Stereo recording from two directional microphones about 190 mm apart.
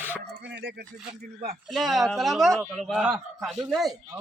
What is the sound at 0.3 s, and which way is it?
Dog, 60° right (ahead or behind).